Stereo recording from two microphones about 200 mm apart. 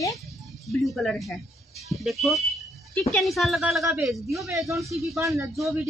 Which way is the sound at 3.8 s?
15° right (ahead or behind).